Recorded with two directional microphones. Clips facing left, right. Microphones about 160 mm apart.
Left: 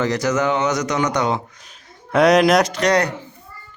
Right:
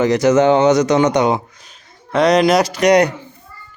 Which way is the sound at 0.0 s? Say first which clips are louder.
Right 7 dB; 20° right (ahead or behind).